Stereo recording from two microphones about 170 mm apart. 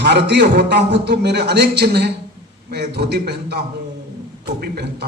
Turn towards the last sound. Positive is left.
turn(degrees=-65)  # may be behind; listen again after turning